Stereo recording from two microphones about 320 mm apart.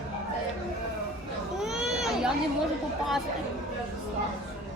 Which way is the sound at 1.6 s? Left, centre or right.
Centre.